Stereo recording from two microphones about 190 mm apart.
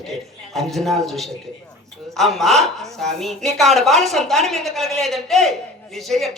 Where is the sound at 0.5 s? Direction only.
Centre (ahead or behind).